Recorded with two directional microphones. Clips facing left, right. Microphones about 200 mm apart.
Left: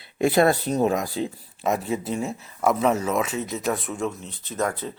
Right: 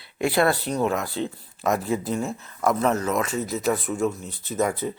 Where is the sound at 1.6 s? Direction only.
5° left (ahead or behind).